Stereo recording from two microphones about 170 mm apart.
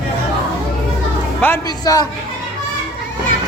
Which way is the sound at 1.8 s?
20° left (ahead or behind).